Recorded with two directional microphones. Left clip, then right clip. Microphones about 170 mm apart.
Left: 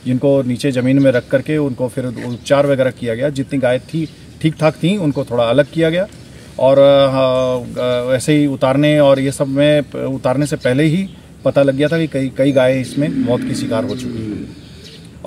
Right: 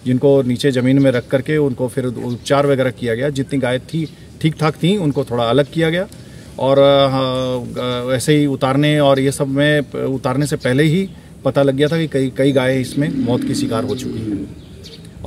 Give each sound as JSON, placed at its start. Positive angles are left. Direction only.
{"t": 0.2, "sound": "speech", "side_deg": -25}